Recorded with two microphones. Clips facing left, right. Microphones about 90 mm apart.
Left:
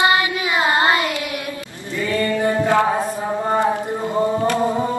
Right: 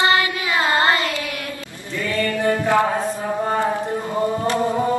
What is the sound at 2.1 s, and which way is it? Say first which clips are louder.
Mantra: left 1 dB; 20° left (ahead or behind).